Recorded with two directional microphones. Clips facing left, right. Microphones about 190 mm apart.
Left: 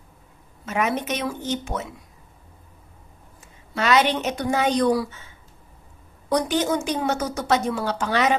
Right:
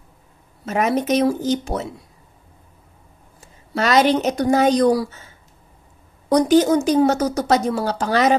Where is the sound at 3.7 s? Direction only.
40° right (ahead or behind).